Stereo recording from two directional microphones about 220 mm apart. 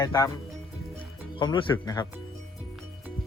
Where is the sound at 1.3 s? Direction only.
20° left (ahead or behind).